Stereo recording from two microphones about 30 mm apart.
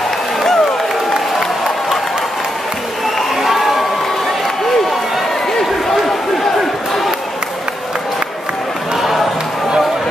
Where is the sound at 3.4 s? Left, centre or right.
Centre.